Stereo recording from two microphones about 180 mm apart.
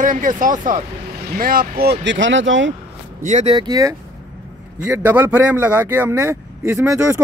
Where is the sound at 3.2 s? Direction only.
40° right (ahead or behind).